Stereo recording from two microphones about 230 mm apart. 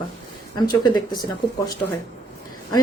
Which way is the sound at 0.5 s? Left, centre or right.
Centre.